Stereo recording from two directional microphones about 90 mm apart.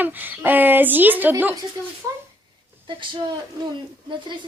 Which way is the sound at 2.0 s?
45° right (ahead or behind).